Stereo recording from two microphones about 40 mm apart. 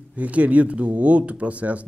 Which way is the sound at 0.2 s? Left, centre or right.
Right.